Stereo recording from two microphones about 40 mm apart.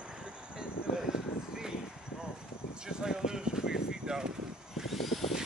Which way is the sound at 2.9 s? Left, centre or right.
Centre.